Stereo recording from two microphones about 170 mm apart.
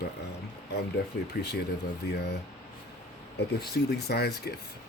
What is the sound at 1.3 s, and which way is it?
Speech, 75° left (ahead or behind).